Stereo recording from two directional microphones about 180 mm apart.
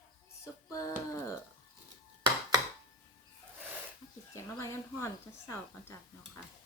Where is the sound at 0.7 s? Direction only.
20° left (ahead or behind).